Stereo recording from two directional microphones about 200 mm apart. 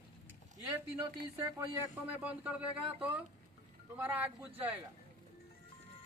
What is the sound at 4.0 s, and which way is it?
Speech, 10° right (ahead or behind).